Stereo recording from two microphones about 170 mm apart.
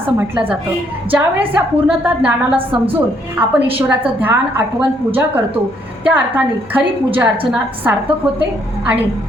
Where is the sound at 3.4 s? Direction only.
10° right (ahead or behind).